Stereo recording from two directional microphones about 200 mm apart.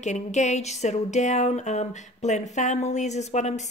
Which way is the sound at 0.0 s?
35° left (ahead or behind).